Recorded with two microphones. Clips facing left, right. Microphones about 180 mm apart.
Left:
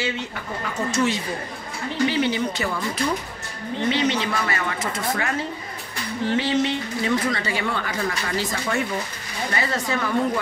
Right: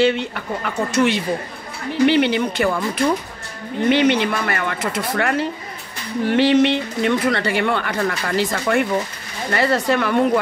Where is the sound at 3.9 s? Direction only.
60° right (ahead or behind).